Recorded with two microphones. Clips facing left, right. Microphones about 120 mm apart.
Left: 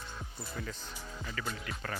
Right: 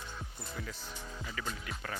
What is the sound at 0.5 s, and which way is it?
Speech, centre (ahead or behind).